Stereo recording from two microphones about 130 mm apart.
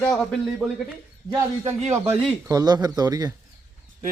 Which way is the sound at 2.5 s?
30° right (ahead or behind).